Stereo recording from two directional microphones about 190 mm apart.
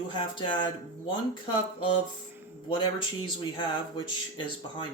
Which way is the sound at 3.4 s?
25° left (ahead or behind).